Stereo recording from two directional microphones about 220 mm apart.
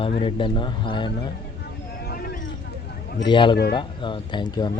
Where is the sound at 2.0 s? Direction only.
45° left (ahead or behind).